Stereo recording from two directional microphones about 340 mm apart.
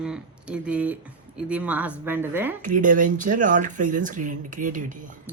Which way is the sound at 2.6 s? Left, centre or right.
Right.